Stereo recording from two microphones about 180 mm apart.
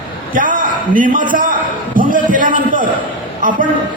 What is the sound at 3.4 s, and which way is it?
Speech, 50° right (ahead or behind).